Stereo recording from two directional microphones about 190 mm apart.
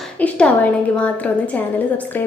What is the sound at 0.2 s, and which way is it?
Speech, 5° left (ahead or behind).